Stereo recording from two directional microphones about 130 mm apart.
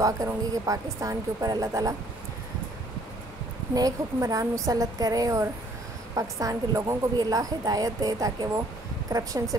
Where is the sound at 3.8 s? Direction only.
25° right (ahead or behind).